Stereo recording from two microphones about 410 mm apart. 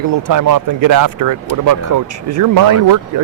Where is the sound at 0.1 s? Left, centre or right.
Right.